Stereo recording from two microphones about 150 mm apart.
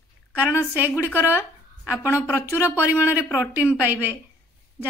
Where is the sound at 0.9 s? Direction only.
20° left (ahead or behind).